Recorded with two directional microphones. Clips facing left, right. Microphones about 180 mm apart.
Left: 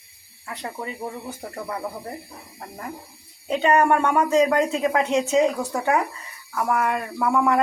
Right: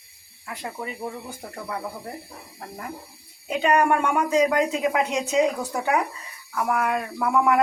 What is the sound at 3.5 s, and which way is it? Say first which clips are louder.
Speech: left 2 dB; 10° right (ahead or behind).